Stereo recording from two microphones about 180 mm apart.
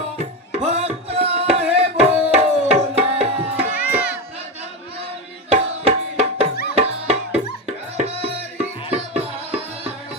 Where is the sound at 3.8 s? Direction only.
60° left (ahead or behind).